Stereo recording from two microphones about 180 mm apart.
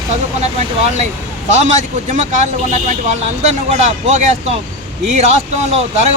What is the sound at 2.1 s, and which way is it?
Speech, 40° right (ahead or behind).